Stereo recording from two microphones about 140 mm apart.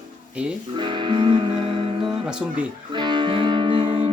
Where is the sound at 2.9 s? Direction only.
35° right (ahead or behind).